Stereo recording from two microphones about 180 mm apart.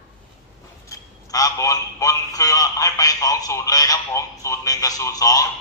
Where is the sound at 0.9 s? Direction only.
20° left (ahead or behind).